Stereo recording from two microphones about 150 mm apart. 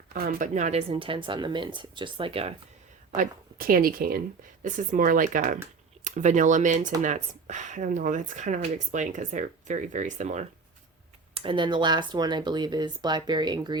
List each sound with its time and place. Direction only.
0.1 s speech: 85° right; by 2.6 s 40° right (ahead or behind)
3.2 s speech: 75° right (ahead or behind)
4.6 s speech: 60° right (ahead or behind)
11.3 s speech: 35° right (ahead or behind)